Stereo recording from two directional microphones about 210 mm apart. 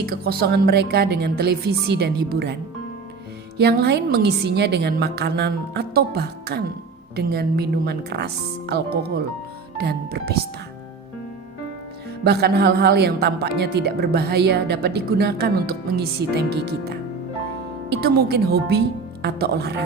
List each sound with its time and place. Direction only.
0.0 s speech: 50° right (ahead or behind)
3.6 s speech: 50° right (ahead or behind)
12.2 s speech: 50° right (ahead or behind)